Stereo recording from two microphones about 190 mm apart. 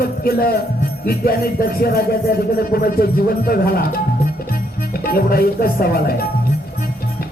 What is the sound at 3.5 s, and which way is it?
Music, 50° left (ahead or behind).